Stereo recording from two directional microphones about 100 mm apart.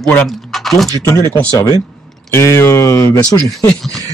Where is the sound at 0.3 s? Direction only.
Centre (ahead or behind).